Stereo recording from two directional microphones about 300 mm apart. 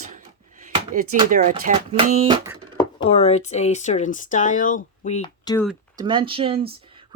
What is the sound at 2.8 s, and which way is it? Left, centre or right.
Speech, centre.